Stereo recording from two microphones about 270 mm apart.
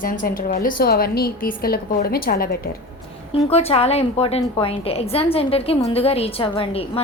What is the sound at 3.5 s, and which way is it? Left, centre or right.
A woman's voice, left.